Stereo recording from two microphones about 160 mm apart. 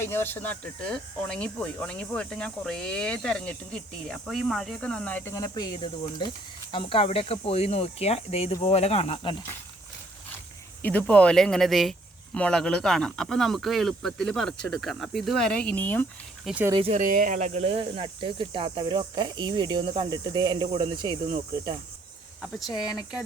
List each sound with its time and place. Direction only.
0.0 s speech: 15° left (ahead or behind); by 9.3 s 35° left (ahead or behind)
10.8 s speech: 10° left (ahead or behind)
16.5 s speech: 5° right (ahead or behind)
16.8 s speech: 50° right (ahead or behind); by 21.2 s 30° right (ahead or behind)
22.8 s speech: 5° right (ahead or behind)